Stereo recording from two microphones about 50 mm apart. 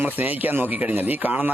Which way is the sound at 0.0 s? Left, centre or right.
Right.